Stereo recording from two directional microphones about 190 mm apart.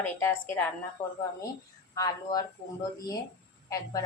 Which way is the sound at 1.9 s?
20° left (ahead or behind).